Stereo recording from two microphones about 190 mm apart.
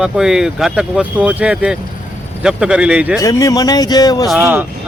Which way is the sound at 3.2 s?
20° left (ahead or behind).